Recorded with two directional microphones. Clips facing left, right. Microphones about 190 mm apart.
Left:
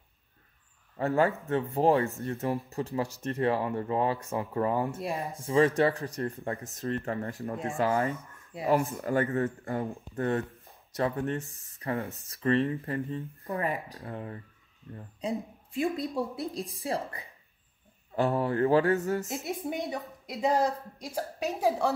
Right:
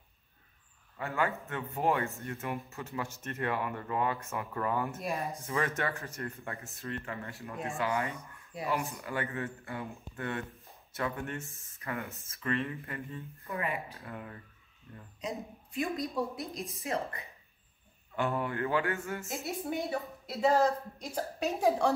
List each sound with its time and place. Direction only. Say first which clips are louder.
0.9 s speech: left 7 dB; 35° left (ahead or behind)
19.4 s a woman's voice: left 2 dB; 20° left (ahead or behind)